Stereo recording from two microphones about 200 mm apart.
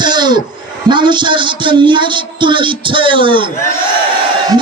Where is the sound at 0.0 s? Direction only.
20° right (ahead or behind).